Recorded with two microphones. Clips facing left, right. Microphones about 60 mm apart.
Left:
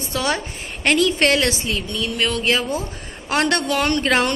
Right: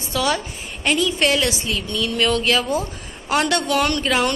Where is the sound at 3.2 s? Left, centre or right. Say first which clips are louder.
Even; left.